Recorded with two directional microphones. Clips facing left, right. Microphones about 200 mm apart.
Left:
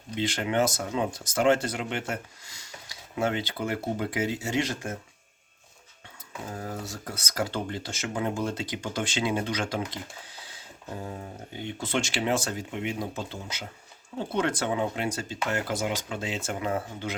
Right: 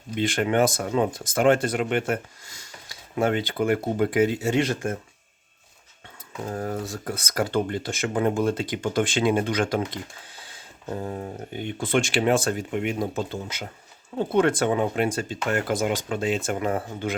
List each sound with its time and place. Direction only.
0.2 s speech: 55° right (ahead or behind)
6.5 s speech: 50° right (ahead or behind)
11.2 s speech: 55° right (ahead or behind)